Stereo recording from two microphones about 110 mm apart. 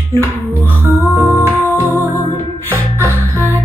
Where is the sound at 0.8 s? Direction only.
20° right (ahead or behind).